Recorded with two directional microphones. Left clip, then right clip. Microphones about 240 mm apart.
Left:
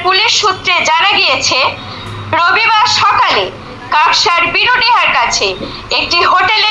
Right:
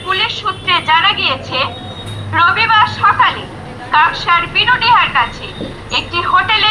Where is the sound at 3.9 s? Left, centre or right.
Left.